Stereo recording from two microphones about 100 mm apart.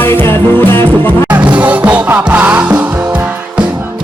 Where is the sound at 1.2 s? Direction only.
15° right (ahead or behind).